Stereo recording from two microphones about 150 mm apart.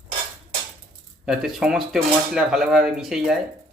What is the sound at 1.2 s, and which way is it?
Speech, 5° right (ahead or behind).